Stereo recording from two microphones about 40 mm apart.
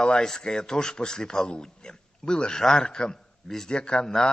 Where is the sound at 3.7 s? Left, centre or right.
Left.